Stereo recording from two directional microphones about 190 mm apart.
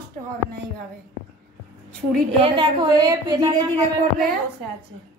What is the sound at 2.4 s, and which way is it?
A woman's voice, 25° right (ahead or behind).